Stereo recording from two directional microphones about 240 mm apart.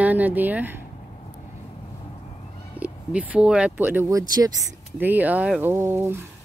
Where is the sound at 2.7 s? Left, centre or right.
Centre.